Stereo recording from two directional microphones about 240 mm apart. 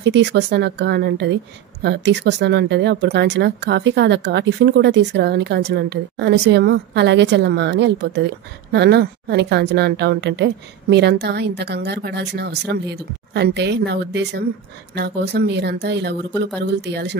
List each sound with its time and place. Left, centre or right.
0.0 s a woman's voice: right